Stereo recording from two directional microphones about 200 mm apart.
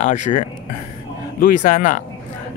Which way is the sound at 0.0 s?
35° left (ahead or behind).